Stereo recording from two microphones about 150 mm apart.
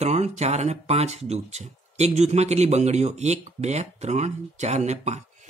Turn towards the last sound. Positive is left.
turn(degrees=-50)  # may be behind; listen again after turning